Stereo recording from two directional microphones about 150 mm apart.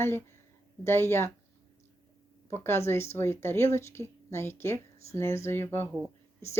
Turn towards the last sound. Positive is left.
turn(degrees=15)  # may be behind; listen again after turning